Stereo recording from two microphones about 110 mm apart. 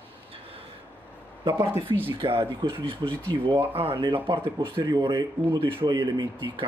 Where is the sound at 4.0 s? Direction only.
45° right (ahead or behind).